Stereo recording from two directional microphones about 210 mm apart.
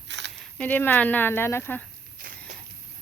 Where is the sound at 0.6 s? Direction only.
10° left (ahead or behind).